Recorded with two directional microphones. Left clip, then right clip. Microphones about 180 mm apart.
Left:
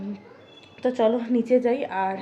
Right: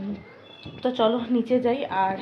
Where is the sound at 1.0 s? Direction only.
15° left (ahead or behind).